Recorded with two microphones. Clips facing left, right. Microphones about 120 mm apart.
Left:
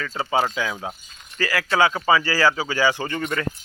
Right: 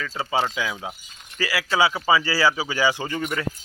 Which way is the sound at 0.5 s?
10° right (ahead or behind).